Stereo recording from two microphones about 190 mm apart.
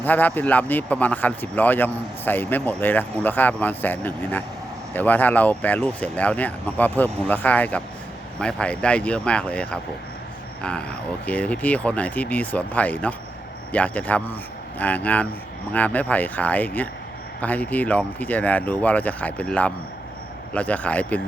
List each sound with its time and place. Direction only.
0.0 s speech: 10° left (ahead or behind)